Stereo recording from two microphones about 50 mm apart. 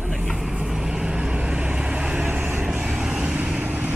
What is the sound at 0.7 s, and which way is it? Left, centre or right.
Vehicle, centre.